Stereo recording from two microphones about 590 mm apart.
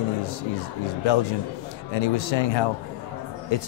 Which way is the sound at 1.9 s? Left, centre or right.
Left.